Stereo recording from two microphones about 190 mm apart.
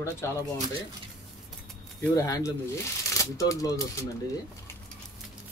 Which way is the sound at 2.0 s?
15° left (ahead or behind).